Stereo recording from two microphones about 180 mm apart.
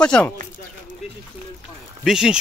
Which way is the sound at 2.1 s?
5° right (ahead or behind).